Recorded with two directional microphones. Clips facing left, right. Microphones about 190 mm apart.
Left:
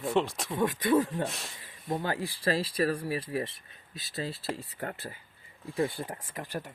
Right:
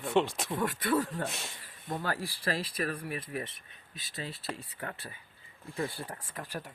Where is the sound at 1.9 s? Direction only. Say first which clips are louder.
Left 3 dB; 20° left (ahead or behind).